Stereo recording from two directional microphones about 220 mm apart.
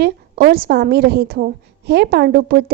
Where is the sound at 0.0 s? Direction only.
45° right (ahead or behind).